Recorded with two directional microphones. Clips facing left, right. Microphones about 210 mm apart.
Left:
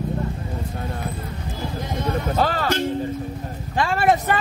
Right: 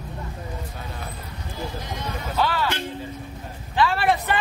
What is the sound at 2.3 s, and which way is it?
Speech, 45° left (ahead or behind).